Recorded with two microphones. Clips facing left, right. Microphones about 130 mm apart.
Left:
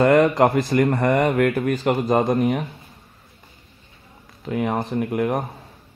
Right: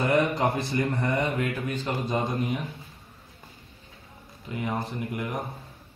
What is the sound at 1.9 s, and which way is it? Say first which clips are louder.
Speech: left 9 dB; 85° left.